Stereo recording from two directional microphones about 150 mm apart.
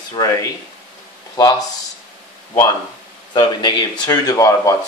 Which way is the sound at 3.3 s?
30° left (ahead or behind).